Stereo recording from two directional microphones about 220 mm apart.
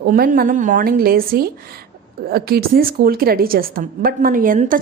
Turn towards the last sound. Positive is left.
turn(degrees=-40)  # may be behind; listen again after turning